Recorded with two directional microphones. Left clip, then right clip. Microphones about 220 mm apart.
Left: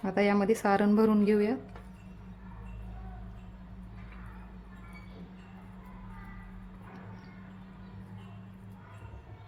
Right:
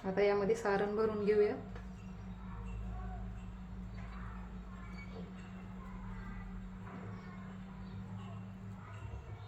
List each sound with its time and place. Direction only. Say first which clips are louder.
0.0 s speech: left 4 dB; 50° left (ahead or behind)